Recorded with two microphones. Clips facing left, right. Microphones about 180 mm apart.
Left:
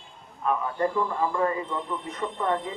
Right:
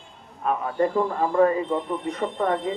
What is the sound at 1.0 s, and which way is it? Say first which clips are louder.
A man's voice: right 6 dB; 40° right (ahead or behind).